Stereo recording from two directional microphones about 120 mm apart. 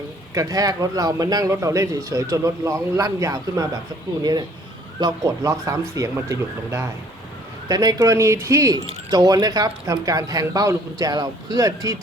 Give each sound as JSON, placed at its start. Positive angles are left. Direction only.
{"t": 0.3, "sound": "speech", "side_deg": -30}